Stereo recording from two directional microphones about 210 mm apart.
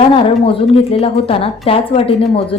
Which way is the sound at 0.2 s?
25° left (ahead or behind).